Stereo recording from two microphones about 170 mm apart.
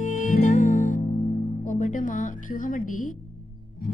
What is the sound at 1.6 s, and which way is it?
A woman's voice, 50° left (ahead or behind).